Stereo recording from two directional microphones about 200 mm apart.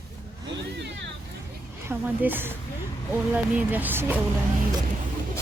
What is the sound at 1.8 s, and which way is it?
Speech, 10° right (ahead or behind).